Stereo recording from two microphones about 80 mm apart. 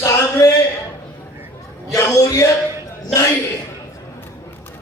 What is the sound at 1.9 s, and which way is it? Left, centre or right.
Chant, left.